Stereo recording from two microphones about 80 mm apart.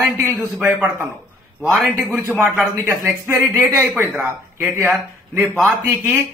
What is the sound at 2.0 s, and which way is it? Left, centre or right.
A man's voice, right.